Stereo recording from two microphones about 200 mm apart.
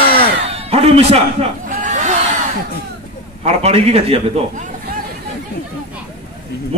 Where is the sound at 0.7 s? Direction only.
30° right (ahead or behind).